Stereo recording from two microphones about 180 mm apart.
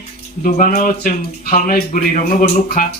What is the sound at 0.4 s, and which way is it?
A man's voice, 45° left (ahead or behind).